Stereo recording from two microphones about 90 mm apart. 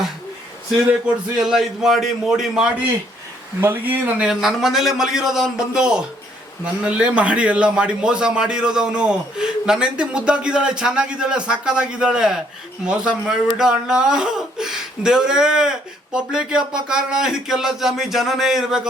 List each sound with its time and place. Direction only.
1.4 s a man's voice: 5° right (ahead or behind)
3.6 s speech: 25° right (ahead or behind)
4.3 s a man's voice: 5° right (ahead or behind)